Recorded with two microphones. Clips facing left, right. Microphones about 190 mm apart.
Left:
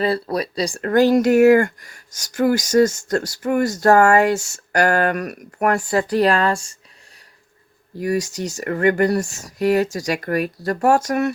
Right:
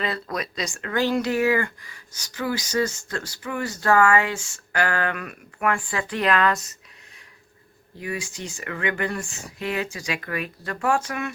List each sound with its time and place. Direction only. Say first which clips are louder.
0.0 s speech: left 8 dB; 35° left (ahead or behind)
0.8 s speech: left 9 dB; 45° left (ahead or behind)
8.0 s speech: left 10 dB; 40° left (ahead or behind)